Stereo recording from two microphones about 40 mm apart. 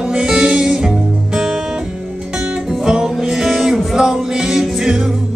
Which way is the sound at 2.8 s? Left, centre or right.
Centre.